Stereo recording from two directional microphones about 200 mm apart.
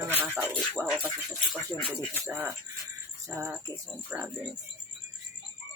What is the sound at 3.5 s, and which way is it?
Speech, 15° right (ahead or behind).